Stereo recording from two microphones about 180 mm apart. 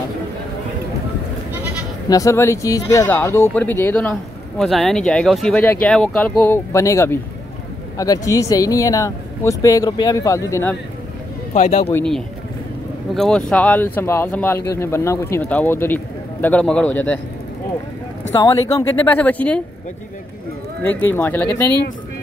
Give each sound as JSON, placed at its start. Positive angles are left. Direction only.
{"t": 2.0, "sound": "speech", "side_deg": 20}
{"t": 11.5, "sound": "speech", "side_deg": 40}
{"t": 11.9, "sound": "speech", "side_deg": 5}
{"t": 18.3, "sound": "speech", "side_deg": 15}
{"t": 20.8, "sound": "speech", "side_deg": 10}